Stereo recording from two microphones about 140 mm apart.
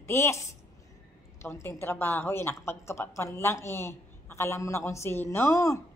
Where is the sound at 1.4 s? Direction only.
15° left (ahead or behind).